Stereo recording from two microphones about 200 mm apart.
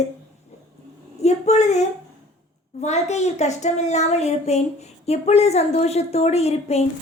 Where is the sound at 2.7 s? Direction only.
35° left (ahead or behind).